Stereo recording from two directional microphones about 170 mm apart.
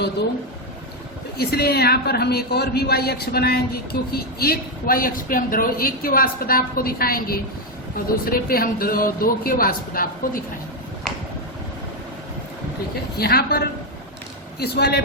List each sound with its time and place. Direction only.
1.4 s a woman's voice: 65° left (ahead or behind)
13.1 s a man's voice: 65° left (ahead or behind)